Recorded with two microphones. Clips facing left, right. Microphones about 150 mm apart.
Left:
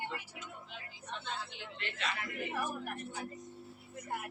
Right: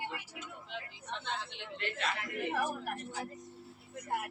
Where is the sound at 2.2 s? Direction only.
70° right (ahead or behind).